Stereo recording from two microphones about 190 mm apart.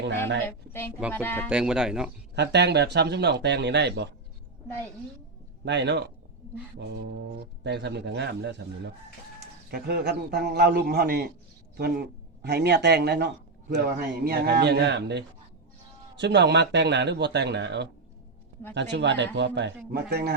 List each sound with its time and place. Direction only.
0.4 s speech: 10° left (ahead or behind)
1.5 s speech: 5° right (ahead or behind)
2.3 s speech: 65° right (ahead or behind)
5.6 s speech: 65° right (ahead or behind)
9.6 s speech: 55° right (ahead or behind)
19.9 s speech: 55° right (ahead or behind)